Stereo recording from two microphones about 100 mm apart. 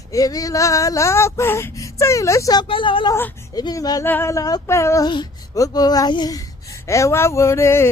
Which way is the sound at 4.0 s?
20° left (ahead or behind).